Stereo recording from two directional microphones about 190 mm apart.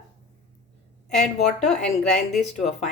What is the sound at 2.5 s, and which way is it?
Speech, 35° left (ahead or behind).